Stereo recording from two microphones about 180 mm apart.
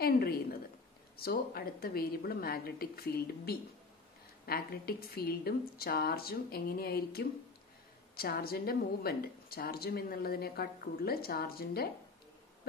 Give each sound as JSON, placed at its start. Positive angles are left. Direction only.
{"t": 0.0, "sound": "a woman's voice", "side_deg": 55}